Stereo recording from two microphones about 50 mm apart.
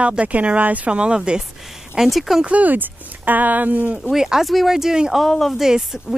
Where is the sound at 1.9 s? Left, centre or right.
Centre.